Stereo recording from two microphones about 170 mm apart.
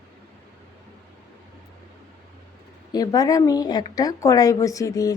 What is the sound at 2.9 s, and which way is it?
A woman's voice, 20° left (ahead or behind).